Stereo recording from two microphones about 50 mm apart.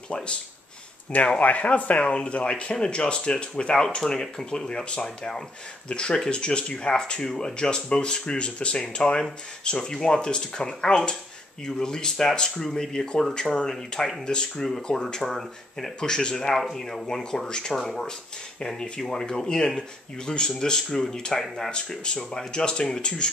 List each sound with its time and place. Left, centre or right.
1.4 s speech: left